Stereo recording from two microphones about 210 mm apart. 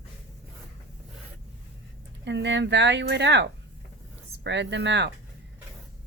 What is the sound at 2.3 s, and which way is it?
Speech, 55° right (ahead or behind).